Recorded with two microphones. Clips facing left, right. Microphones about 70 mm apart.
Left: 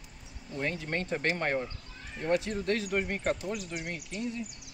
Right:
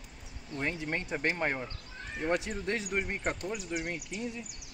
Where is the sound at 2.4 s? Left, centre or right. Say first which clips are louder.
Left 3 dB; centre.